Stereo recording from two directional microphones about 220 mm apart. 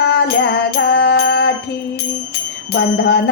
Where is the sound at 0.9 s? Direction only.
50° left (ahead or behind).